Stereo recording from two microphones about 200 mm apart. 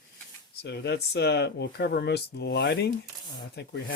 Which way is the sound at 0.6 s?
55° left (ahead or behind).